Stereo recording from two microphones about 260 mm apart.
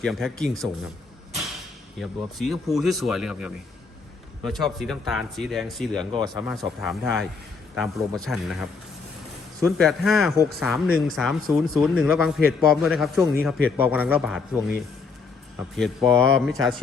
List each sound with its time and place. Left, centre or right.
0.0 s a man's voice: centre
2.0 s a man's voice: centre
6.1 s speech: centre
6.4 s a man's voice: centre
9.7 s a man's voice: centre
15.7 s a man's voice: centre